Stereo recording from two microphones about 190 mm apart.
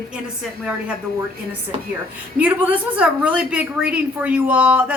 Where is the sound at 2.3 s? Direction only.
5° right (ahead or behind).